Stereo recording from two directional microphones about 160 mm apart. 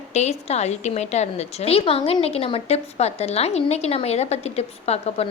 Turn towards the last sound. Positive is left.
turn(degrees=40)  # may be behind; listen again after turning